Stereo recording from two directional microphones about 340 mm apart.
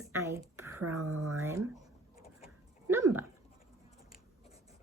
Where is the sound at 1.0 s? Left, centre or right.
Right.